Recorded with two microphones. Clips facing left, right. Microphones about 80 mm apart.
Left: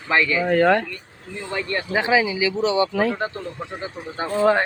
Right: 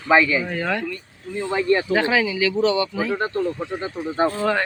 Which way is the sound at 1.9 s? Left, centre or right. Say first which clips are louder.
Even; centre.